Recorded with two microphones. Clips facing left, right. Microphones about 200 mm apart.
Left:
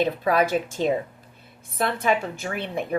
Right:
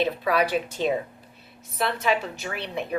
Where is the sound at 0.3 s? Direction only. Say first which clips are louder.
Left 3 dB; 50° left (ahead or behind).